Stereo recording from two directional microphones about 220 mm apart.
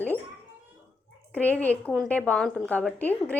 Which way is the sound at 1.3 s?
5° left (ahead or behind).